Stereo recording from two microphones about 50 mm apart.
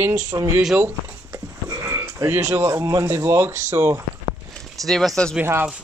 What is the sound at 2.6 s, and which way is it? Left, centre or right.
Speech, right.